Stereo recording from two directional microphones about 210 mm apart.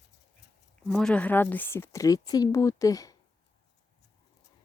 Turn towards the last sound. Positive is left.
turn(degrees=15)  # may be behind; listen again after turning